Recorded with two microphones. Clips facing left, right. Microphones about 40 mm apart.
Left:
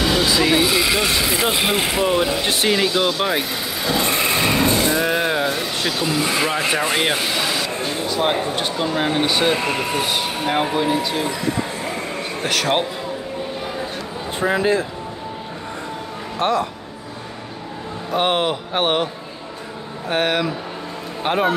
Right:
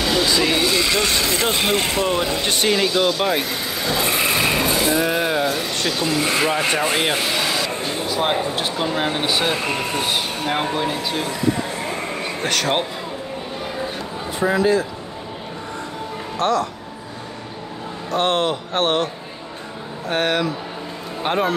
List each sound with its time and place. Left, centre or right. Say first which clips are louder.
0.0 s speech: left 1 dB; centre
12.4 s speech: left 1 dB; centre
14.5 s speech: right 1 dB; left
16.3 s speech: even; left
18.1 s a man's voice: even; centre
20.1 s a man's voice: left 1 dB; centre